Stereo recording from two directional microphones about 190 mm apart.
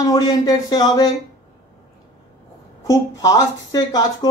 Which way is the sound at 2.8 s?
15° left (ahead or behind).